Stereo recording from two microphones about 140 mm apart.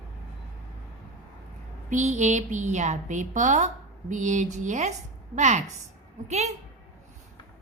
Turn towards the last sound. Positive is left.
turn(degrees=-55)  # may be behind; listen again after turning